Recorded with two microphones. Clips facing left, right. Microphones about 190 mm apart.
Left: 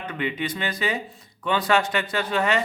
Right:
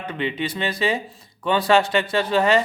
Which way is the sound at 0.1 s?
30° right (ahead or behind).